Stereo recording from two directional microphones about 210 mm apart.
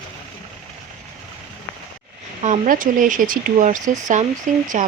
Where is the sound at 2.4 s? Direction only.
35° right (ahead or behind).